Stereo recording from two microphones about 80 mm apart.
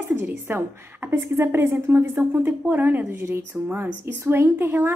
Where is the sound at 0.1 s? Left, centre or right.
Right.